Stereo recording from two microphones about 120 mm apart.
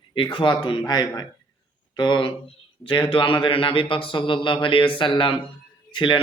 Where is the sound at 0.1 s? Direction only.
40° left (ahead or behind).